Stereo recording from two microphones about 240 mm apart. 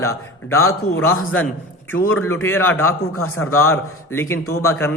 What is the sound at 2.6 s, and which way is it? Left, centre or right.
Speech, left.